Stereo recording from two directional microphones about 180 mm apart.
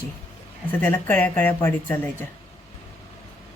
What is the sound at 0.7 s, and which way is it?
A woman's voice, 10° left (ahead or behind).